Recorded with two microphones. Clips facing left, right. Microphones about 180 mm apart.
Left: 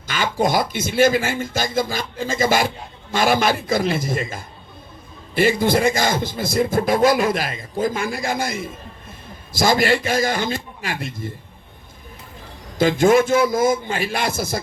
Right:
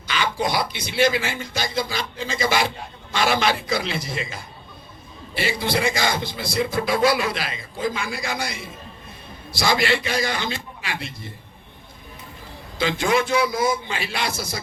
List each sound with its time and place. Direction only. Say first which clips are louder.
0.1 s speech: left 4 dB; 45° left (ahead or behind)
12.8 s speech: left 7 dB; 45° left (ahead or behind)